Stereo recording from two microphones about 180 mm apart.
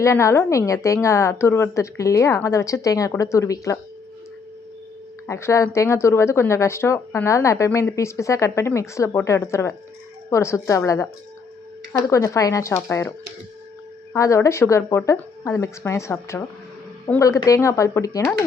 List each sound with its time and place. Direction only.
0.0 s speech: 15° left (ahead or behind)
5.2 s speech: 15° left (ahead or behind)